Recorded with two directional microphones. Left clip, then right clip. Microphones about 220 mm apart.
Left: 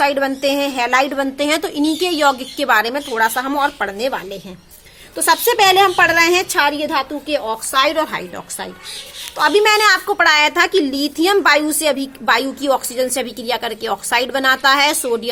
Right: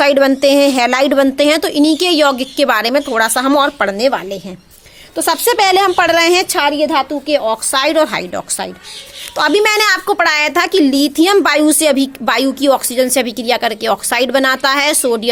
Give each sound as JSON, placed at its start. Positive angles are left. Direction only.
{"t": 0.0, "sound": "a woman's voice", "side_deg": -45}